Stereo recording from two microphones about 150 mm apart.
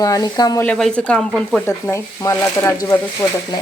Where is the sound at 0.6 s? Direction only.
5° left (ahead or behind).